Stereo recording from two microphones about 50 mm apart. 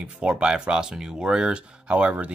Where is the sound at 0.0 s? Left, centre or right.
Centre.